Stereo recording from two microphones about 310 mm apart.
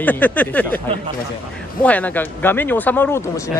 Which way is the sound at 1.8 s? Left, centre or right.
Centre.